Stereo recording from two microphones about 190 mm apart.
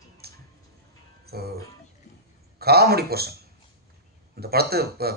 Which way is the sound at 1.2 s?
55° right (ahead or behind).